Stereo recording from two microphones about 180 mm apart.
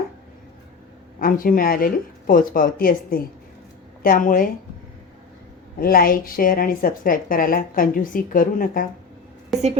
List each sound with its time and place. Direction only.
1.2 s a woman's voice: 50° left (ahead or behind)
5.8 s a woman's voice: 55° left (ahead or behind)